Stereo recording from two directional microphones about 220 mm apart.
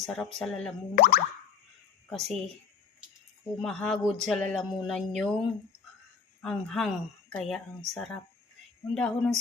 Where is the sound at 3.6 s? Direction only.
Centre (ahead or behind).